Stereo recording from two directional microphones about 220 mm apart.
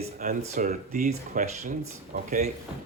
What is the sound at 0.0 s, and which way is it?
Speech, 35° right (ahead or behind).